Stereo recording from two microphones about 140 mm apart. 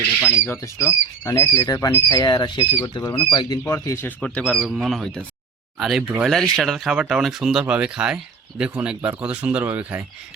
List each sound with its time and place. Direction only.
0.4 s speech: 20° left (ahead or behind)
3.6 s speech: 20° left (ahead or behind)
4.2 s speech: 5° left (ahead or behind)
6.2 s speech: centre (ahead or behind)